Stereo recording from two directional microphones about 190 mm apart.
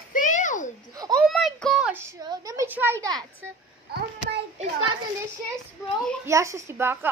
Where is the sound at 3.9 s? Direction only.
55° right (ahead or behind).